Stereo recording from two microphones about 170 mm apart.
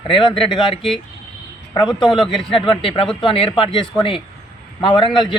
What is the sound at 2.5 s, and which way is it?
A man's voice, 30° left (ahead or behind).